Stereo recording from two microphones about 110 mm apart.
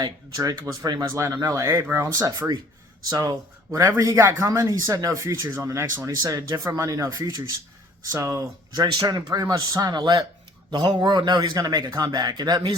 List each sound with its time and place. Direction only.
0.0 s a man's voice: 35° right (ahead or behind)